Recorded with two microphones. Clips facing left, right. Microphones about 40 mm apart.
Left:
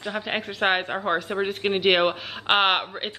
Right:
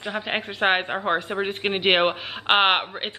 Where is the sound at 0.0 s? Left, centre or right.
Centre.